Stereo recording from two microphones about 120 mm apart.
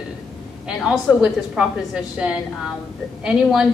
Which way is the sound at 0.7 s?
5° right (ahead or behind).